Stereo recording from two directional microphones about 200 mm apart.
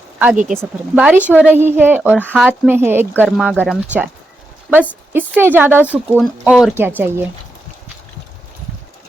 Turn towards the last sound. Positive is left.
turn(degrees=-10)  # may be behind; listen again after turning